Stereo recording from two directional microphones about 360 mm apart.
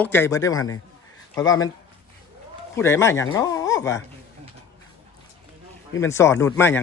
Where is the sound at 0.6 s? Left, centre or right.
Left.